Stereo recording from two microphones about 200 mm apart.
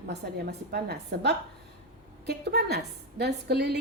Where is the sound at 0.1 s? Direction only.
55° right (ahead or behind).